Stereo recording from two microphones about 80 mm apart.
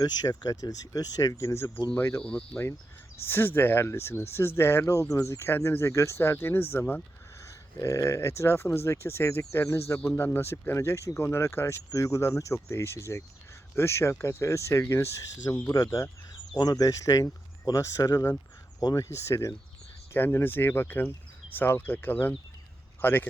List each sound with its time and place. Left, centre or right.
0.0 s speech: left
2.2 s speech: centre
3.2 s speech: left
4.9 s speech: left
7.8 s speech: left
15.7 s speech: left
19.0 s speech: left
20.1 s speech: left